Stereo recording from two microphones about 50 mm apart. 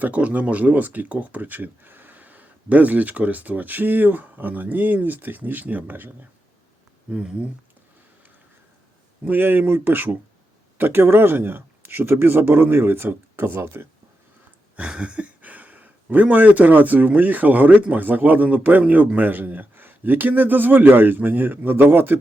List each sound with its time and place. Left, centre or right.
0.0 s speech: right
7.1 s speech: centre
9.2 s speech: right
14.8 s speech: right